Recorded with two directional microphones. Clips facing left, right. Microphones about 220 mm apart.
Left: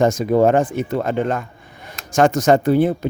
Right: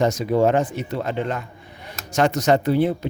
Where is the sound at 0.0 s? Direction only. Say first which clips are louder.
Left 4 dB; 50° left (ahead or behind).